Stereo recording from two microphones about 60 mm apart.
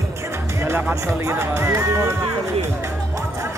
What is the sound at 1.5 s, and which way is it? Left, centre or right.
Speech, right.